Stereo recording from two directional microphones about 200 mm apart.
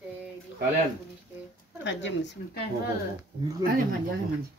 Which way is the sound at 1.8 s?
65° left (ahead or behind).